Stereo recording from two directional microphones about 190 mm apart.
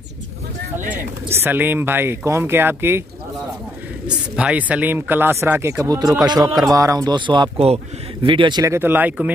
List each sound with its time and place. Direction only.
1.3 s speech: 10° right (ahead or behind)
4.1 s speech: 5° right (ahead or behind)